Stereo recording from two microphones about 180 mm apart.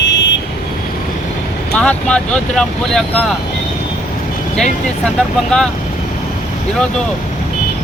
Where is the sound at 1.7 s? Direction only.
5° left (ahead or behind).